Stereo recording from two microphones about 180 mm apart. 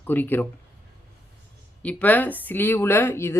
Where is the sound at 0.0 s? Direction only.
10° left (ahead or behind).